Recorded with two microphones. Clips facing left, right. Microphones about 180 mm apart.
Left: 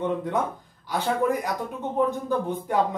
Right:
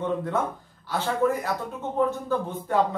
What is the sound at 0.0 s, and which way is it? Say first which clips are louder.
Speech: left 1 dB; 15° left (ahead or behind).